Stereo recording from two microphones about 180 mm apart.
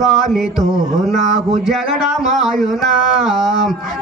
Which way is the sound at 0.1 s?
Centre (ahead or behind).